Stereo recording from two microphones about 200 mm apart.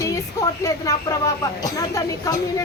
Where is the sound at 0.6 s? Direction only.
15° left (ahead or behind).